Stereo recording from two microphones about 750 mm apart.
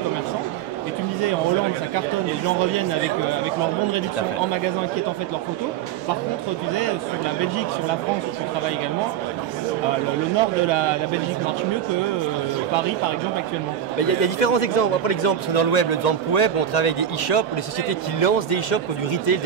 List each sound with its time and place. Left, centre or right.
13.9 s speech: left